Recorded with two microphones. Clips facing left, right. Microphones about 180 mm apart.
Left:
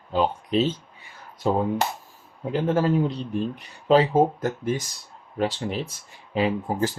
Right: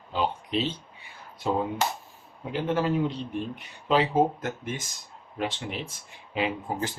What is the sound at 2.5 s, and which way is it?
Speech, 40° left (ahead or behind).